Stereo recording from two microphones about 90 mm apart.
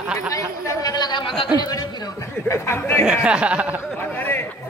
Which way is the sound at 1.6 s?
45° left (ahead or behind).